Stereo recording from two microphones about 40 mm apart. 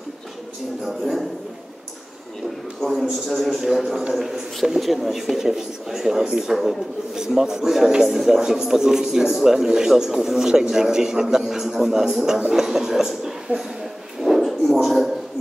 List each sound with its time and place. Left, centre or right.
2.8 s a man's voice: centre
13.5 s speech: right
14.2 s a sound: centre